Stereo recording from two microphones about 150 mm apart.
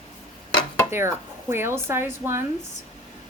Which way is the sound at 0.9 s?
15° right (ahead or behind).